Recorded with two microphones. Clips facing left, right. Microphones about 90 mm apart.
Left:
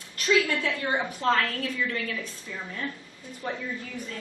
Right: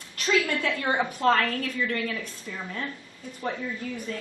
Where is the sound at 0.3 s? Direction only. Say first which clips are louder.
Left 1 dB; 50° right (ahead or behind).